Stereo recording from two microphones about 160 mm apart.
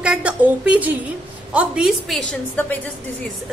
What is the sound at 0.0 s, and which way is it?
A woman's voice, 5° right (ahead or behind).